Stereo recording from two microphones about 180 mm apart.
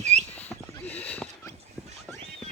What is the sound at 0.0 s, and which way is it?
Horse, 40° right (ahead or behind).